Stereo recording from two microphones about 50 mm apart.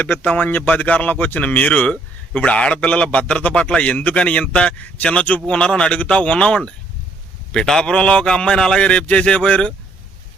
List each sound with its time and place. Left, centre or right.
0.0 s a man's voice: left